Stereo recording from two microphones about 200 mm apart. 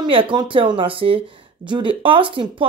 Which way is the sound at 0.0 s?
25° right (ahead or behind).